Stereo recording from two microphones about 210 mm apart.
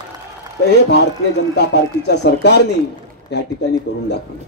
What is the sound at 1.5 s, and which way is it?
Speech, 55° left (ahead or behind).